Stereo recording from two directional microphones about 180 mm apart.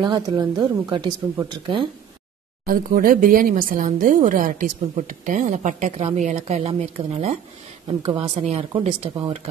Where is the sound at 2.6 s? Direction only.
50° right (ahead or behind).